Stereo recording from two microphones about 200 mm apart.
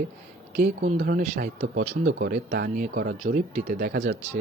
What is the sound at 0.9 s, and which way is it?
Speech, 50° right (ahead or behind).